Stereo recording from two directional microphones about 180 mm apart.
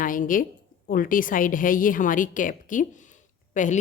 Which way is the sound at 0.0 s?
50° left (ahead or behind).